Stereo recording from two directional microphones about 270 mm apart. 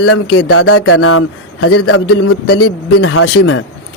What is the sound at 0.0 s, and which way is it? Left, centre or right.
A man's voice, left.